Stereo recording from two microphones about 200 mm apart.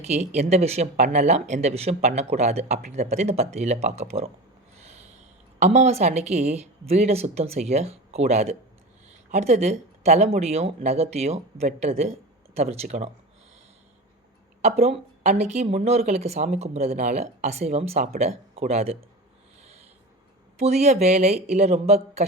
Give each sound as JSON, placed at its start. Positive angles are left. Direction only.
{"t": 0.0, "sound": "speech", "side_deg": -35}
{"t": 4.8, "sound": "a sound", "side_deg": -35}
{"t": 5.5, "sound": "speech", "side_deg": -35}
{"t": 14.6, "sound": "speech", "side_deg": -30}
{"t": 20.6, "sound": "speech", "side_deg": -35}